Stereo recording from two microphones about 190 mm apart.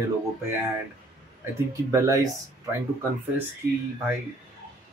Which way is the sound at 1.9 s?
20° right (ahead or behind).